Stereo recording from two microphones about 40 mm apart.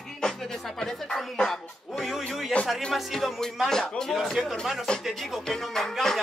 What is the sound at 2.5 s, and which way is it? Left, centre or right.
Speech, left.